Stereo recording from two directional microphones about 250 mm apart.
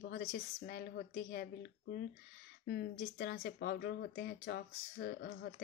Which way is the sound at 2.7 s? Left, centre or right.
Left.